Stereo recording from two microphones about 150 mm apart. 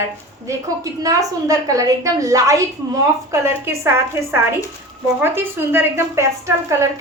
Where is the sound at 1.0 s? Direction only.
25° right (ahead or behind).